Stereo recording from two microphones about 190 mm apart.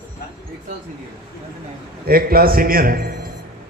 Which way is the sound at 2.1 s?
50° right (ahead or behind).